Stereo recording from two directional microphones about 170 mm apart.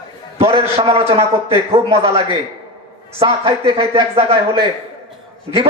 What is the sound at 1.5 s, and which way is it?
Speech, 35° right (ahead or behind).